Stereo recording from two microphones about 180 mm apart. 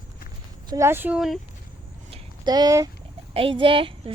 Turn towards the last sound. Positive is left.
turn(degrees=-30)  # may be behind; listen again after turning